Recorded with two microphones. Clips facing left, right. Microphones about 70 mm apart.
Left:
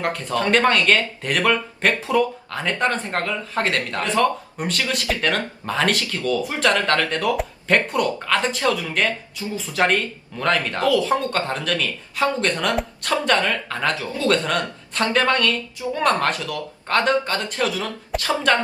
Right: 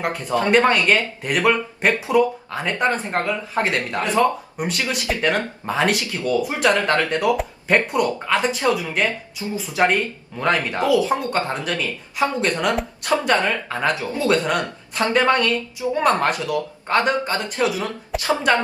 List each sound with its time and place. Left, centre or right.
0.0 s speech: centre
18.1 s a woman's voice: centre